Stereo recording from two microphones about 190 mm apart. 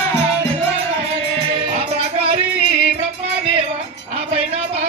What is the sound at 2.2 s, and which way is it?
Music, 30° right (ahead or behind).